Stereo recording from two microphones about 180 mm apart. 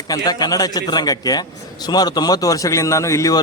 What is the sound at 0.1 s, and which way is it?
A man's voice, 20° left (ahead or behind).